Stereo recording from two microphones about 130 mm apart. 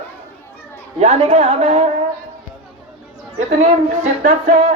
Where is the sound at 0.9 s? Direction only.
55° right (ahead or behind).